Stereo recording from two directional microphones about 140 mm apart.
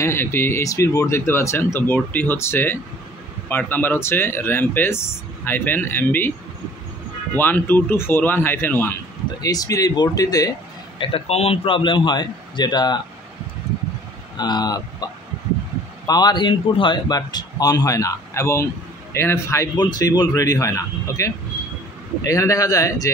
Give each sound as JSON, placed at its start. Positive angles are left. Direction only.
{"t": 0.0, "sound": "speech", "side_deg": 15}
{"t": 7.3, "sound": "speech", "side_deg": 15}
{"t": 9.4, "sound": "a man's voice", "side_deg": 25}
{"t": 11.0, "sound": "a man's voice", "side_deg": 40}
{"t": 14.3, "sound": "speech", "side_deg": 30}
{"t": 16.1, "sound": "a man's voice", "side_deg": 30}